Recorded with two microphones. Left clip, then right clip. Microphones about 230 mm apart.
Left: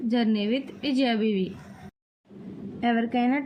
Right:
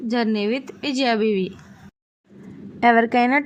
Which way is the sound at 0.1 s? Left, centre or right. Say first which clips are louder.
Right 5 dB; right.